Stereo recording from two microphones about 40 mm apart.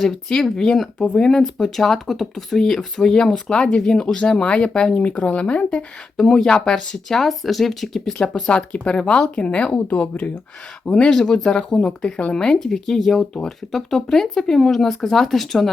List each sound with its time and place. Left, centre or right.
0.0 s speech: centre
0.9 s speech: left
1.2 s speech: centre
4.9 s speech: left
6.1 s speech: centre
8.4 s speech: left
9.9 s speech: left
10.8 s speech: left
11.1 s speech: centre